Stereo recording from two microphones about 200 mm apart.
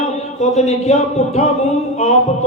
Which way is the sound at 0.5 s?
35° left (ahead or behind).